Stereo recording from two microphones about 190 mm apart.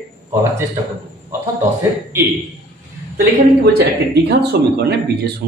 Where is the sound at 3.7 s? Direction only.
60° right (ahead or behind).